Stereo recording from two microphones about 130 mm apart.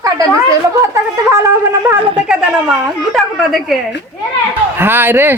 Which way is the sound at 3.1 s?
Centre (ahead or behind).